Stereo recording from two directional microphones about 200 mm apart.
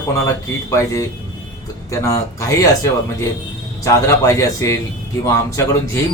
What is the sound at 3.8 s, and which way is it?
Speech, 15° left (ahead or behind).